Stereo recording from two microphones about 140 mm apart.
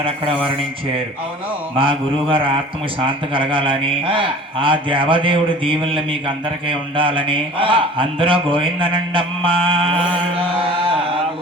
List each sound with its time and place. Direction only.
1.7 s speech: 40° right (ahead or behind)